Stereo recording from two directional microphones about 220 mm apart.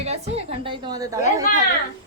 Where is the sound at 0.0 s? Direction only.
30° right (ahead or behind).